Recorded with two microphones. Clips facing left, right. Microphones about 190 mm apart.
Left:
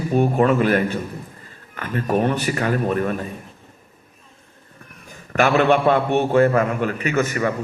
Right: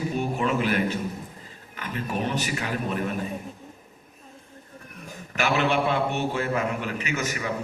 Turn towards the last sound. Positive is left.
turn(degrees=50)  # may be behind; listen again after turning